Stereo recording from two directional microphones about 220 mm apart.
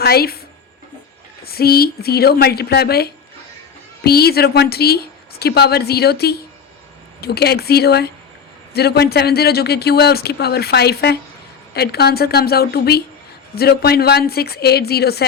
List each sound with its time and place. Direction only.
0.0 s a woman's voice: 45° left (ahead or behind)
1.5 s speech: 45° left (ahead or behind)